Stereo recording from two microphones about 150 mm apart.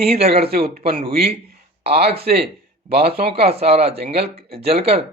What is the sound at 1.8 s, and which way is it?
Speech, 40° right (ahead or behind).